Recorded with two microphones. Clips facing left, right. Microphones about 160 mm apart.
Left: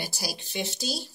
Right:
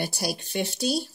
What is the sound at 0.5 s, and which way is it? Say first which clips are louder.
Speech: right 1 dB; centre (ahead or behind).